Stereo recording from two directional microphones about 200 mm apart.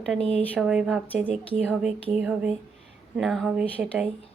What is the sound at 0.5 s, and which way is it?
Speech, 5° right (ahead or behind).